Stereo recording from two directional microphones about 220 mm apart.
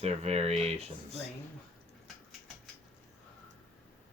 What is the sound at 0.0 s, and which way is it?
Speech, 30° right (ahead or behind).